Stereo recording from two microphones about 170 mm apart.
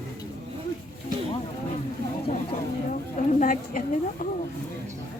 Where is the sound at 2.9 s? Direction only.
45° left (ahead or behind).